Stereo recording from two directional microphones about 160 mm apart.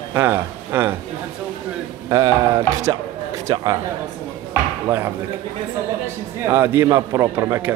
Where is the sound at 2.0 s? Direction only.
25° right (ahead or behind).